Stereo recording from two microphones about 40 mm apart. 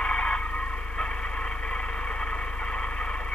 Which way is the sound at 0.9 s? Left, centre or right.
Left.